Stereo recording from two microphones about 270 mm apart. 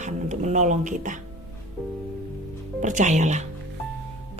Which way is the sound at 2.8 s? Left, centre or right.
Right.